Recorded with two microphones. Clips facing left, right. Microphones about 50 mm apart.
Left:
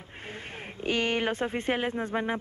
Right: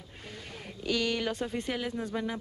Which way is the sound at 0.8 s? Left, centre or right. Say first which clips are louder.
Left 3 dB; left.